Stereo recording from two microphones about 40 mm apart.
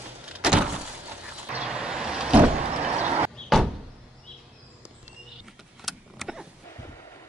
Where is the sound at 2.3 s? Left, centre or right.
Right.